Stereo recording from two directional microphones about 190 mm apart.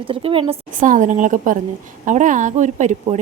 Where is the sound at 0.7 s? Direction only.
45° right (ahead or behind).